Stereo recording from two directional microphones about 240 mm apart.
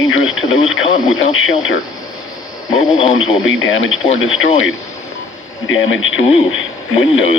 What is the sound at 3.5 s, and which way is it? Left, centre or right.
Speech, left.